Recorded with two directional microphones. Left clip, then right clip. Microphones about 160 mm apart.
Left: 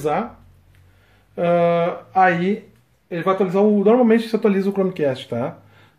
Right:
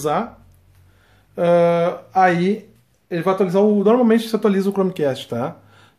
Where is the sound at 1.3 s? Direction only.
15° right (ahead or behind).